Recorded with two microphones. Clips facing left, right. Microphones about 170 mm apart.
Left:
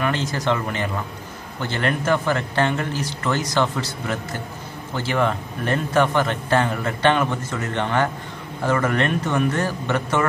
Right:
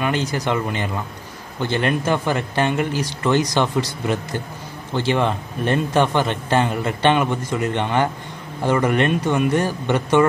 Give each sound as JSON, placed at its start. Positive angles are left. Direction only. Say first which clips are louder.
{"t": 0.0, "sound": "speech", "louder": "right 1 dB", "side_deg": -15}
{"t": 4.9, "sound": "a man's voice", "louder": "right 2 dB", "side_deg": -20}